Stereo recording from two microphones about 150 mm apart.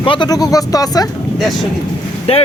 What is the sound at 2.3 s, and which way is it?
Speech, 40° left (ahead or behind).